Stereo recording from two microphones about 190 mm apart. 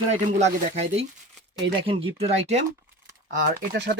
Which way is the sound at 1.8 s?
30° right (ahead or behind).